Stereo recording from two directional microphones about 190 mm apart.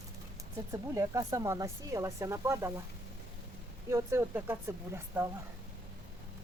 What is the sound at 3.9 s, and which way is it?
Speech, 15° right (ahead or behind).